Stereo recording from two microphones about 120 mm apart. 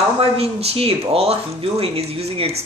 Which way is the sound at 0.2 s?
55° right (ahead or behind).